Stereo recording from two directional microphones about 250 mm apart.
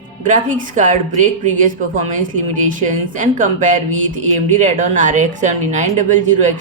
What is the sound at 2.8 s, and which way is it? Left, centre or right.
A woman's voice, right.